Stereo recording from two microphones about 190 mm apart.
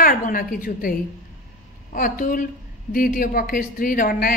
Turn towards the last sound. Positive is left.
turn(degrees=50)  # may be behind; listen again after turning